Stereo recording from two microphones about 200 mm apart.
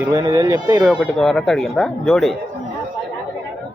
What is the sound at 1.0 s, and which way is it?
Speech, 5° left (ahead or behind).